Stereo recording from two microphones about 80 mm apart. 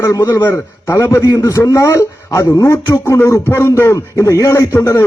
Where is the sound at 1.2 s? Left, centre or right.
Left.